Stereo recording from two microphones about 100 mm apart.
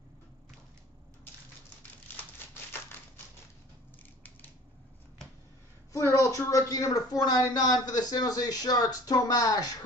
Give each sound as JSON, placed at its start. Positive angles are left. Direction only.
{"t": 2.1, "sound": "typewriter", "side_deg": 20}
{"t": 5.9, "sound": "speech", "side_deg": 30}